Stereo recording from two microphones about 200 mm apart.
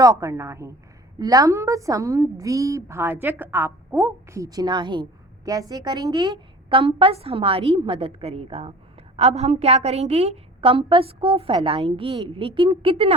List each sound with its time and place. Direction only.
0.0 s a woman's voice: 15° right (ahead or behind)